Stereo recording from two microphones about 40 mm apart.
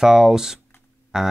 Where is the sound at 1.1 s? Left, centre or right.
Centre.